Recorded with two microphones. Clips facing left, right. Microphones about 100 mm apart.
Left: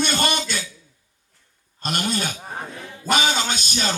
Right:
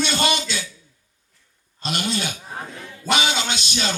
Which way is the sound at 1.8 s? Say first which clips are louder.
Left 1 dB; 45° left (ahead or behind).